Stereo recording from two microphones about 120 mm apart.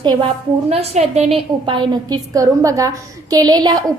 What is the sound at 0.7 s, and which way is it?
Speech, 60° right (ahead or behind).